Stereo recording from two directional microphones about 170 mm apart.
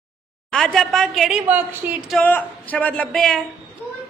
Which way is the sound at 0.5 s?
5° left (ahead or behind).